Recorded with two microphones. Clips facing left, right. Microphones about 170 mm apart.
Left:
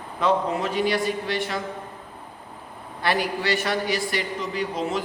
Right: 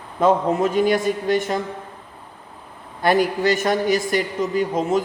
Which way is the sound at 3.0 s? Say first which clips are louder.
Right 7 dB; 45° right (ahead or behind).